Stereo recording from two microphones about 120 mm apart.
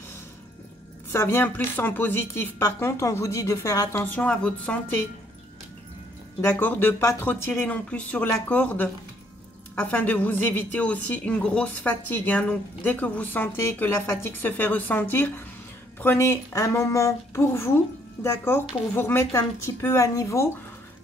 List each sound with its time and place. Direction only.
1.1 s speech: 20° left (ahead or behind)
4.0 s a woman's voice: 10° left (ahead or behind)
6.4 s a woman's voice: 20° left (ahead or behind)